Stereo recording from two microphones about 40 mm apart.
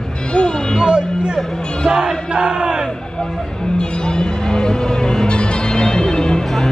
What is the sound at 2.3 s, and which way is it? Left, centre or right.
Battle cry, right.